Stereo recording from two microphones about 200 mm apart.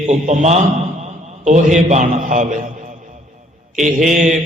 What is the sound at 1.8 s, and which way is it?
Speech, 35° right (ahead or behind).